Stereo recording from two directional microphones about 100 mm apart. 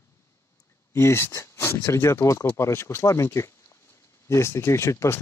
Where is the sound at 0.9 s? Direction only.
25° left (ahead or behind).